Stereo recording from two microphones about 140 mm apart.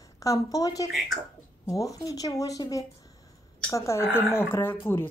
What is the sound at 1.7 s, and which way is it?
Speech, 25° left (ahead or behind).